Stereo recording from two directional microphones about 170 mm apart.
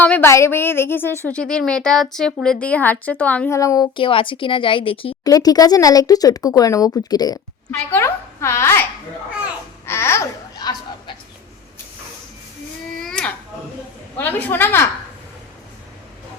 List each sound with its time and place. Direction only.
0.0 s a woman's voice: 10° left (ahead or behind)
3.6 s a woman's voice: 20° left (ahead or behind)
9.8 s babbling: 15° left (ahead or behind)
13.0 s a sound: 5° left (ahead or behind)
14.2 s a woman's voice: 10° left (ahead or behind)